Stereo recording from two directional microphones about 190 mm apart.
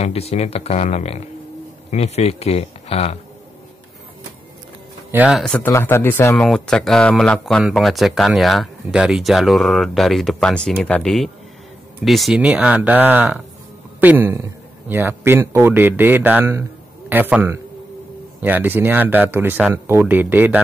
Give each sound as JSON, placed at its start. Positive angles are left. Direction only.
{"t": 0.0, "sound": "speech", "side_deg": 35}
{"t": 5.1, "sound": "speech", "side_deg": -5}
{"t": 5.7, "sound": "a man's voice", "side_deg": 15}